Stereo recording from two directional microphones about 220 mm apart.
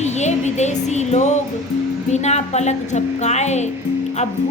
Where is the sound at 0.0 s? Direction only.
30° left (ahead or behind).